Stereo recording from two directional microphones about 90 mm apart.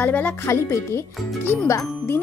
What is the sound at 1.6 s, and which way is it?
Speech, 35° left (ahead or behind).